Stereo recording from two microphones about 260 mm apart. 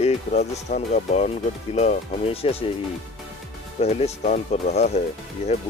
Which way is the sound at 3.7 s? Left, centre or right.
Left.